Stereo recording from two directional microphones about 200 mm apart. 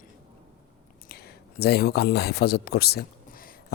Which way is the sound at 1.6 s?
50° left (ahead or behind).